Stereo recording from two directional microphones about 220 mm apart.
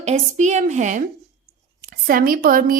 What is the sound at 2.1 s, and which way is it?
Speech, 40° right (ahead or behind).